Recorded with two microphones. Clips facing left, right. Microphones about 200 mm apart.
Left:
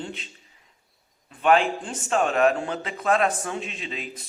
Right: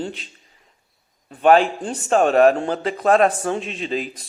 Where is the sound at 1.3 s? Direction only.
35° right (ahead or behind).